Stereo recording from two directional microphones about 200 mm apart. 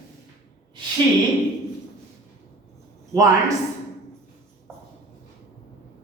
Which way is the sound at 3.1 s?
15° right (ahead or behind).